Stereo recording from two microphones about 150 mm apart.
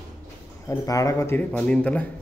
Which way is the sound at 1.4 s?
5° left (ahead or behind).